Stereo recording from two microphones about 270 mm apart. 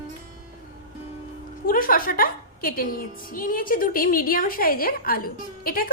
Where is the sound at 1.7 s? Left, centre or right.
Left.